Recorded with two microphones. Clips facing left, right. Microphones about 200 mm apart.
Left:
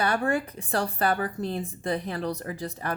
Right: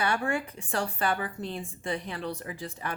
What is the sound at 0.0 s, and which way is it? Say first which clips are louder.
A woman's voice: left 3 dB; 35° left (ahead or behind).